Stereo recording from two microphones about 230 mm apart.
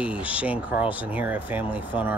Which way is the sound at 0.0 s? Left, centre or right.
Centre.